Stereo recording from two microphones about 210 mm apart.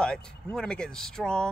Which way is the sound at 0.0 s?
5° left (ahead or behind).